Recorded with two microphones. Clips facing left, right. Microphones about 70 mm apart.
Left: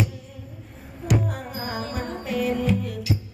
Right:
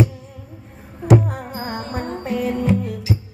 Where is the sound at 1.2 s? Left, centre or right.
Right.